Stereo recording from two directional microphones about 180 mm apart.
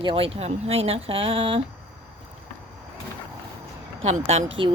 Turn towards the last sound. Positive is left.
turn(degrees=-40)  # may be behind; listen again after turning